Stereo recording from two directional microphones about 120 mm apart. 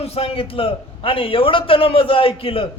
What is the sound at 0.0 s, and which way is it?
A man's voice, 55° left (ahead or behind).